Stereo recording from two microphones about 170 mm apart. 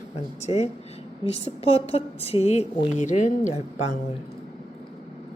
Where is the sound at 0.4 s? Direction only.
40° left (ahead or behind).